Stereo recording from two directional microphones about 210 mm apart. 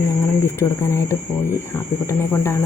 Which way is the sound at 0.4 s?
15° left (ahead or behind).